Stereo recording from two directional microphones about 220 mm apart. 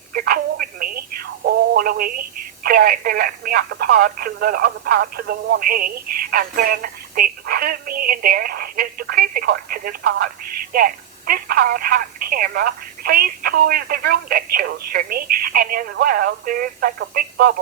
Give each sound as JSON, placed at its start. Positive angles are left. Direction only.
{"t": 0.1, "sound": "telephone", "side_deg": -40}
{"t": 2.6, "sound": "speech", "side_deg": -45}